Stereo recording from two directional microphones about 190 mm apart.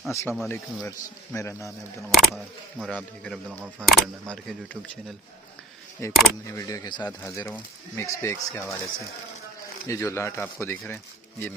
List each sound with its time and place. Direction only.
0.1 s speech: 15° left (ahead or behind)
2.1 s speech: centre (ahead or behind)
3.5 s speech: 10° right (ahead or behind)
3.8 s speech: centre (ahead or behind)
6.5 s speech: 15° left (ahead or behind)